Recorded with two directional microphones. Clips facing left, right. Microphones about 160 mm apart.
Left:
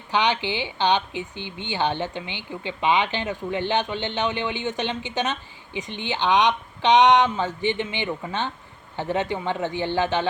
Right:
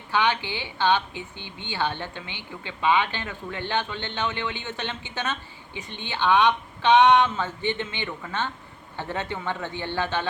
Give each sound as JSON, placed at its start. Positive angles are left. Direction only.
{"t": 0.1, "sound": "speech", "side_deg": 20}